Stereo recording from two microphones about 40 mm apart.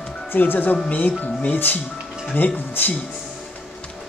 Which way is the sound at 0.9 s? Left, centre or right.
Left.